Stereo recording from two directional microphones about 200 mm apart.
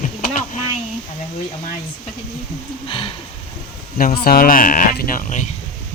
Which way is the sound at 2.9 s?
25° left (ahead or behind).